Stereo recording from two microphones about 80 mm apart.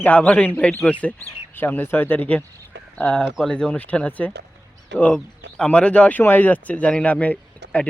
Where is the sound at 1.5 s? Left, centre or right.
Left.